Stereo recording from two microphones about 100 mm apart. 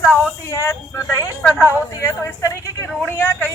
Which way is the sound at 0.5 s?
30° left (ahead or behind).